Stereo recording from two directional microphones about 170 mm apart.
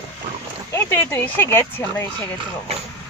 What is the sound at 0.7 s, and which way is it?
Speech, 15° left (ahead or behind).